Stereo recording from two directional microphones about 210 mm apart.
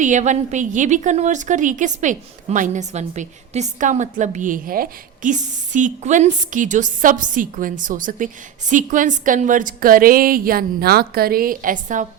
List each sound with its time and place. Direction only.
0.0 s a woman's voice: 35° right (ahead or behind)